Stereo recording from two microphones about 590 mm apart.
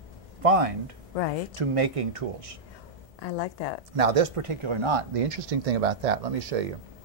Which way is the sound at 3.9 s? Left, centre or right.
Right.